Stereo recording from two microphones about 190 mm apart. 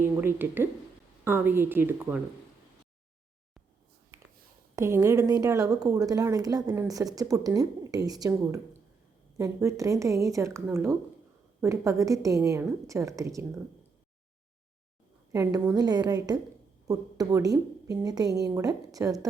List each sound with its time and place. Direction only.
0.0 s a woman's voice: 10° right (ahead or behind)
4.7 s a woman's voice: 15° right (ahead or behind)
9.4 s a woman's voice: 15° right (ahead or behind)
15.3 s a woman's voice: 15° right (ahead or behind)